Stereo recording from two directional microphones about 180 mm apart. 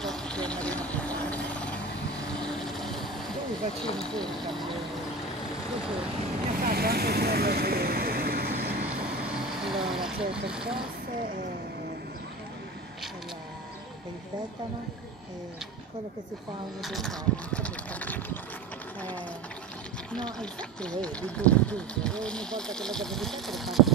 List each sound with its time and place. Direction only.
0.0 s vehicle: 5° left (ahead or behind)
3.8 s speech: 5° left (ahead or behind)
6.6 s vehicle: 55° right (ahead or behind)
8.8 s vehicle: 5° right (ahead or behind)
9.8 s speech: 5° right (ahead or behind)
11.1 s speech: 50° right (ahead or behind)
16.8 s speech: centre (ahead or behind)
20.1 s speech: 5° left (ahead or behind)